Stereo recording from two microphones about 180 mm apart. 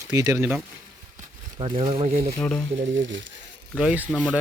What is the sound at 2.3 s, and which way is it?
Speech, 5° left (ahead or behind).